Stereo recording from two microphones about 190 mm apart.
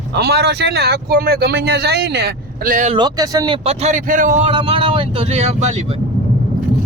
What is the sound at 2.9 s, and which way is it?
Speech, 25° right (ahead or behind).